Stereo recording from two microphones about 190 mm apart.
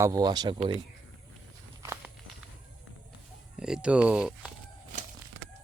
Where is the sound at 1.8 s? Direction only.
15° right (ahead or behind).